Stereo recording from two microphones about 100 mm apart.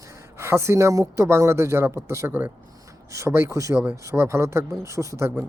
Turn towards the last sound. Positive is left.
turn(degrees=-25)  # may be behind; listen again after turning